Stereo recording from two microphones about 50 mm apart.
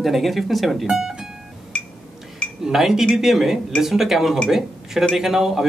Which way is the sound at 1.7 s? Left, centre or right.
Left.